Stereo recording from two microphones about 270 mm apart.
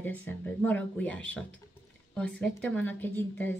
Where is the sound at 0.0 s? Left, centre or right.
Centre.